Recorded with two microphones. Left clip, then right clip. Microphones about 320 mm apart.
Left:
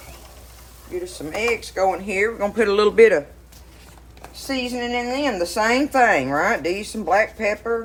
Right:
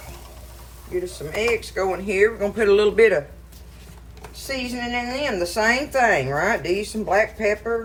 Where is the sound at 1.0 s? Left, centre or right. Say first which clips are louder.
Left 1 dB; centre.